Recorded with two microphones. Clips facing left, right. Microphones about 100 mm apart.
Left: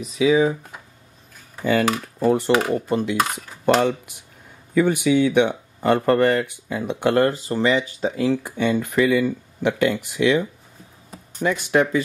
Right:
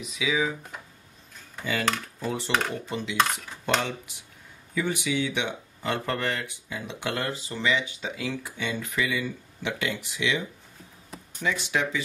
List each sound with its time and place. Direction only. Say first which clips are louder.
0.0 s speech: left 10 dB; 40° left (ahead or behind)
1.6 s speech: left 8 dB; 50° left (ahead or behind)
4.7 s speech: left 10 dB; 50° left (ahead or behind)